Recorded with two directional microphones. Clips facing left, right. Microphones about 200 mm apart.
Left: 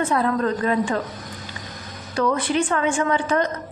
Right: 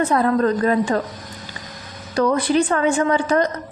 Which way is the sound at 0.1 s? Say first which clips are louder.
Right 4 dB; 40° right (ahead or behind).